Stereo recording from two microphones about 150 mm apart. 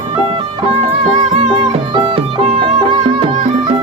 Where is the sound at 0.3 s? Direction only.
40° right (ahead or behind).